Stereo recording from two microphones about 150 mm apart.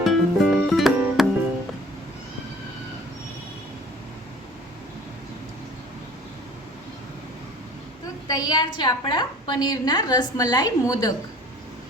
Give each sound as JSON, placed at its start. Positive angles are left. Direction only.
{"t": 0.0, "sound": "music", "side_deg": 0}
{"t": 8.3, "sound": "a woman's voice", "side_deg": 30}